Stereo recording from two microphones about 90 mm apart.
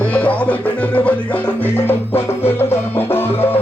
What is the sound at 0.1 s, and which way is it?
Music, 15° left (ahead or behind).